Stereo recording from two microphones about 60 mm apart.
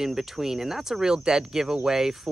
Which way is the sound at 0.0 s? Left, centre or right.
Centre.